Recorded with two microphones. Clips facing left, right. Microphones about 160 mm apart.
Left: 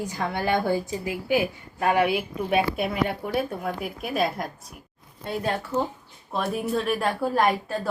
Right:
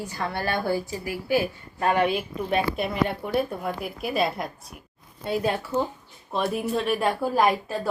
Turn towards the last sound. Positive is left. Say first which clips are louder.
# right 1 dB
turn(degrees=0)  # may be behind; listen again after turning